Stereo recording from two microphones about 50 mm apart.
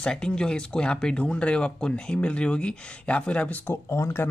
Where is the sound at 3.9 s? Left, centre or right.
Left.